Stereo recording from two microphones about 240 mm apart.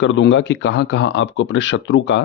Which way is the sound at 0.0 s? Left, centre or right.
Left.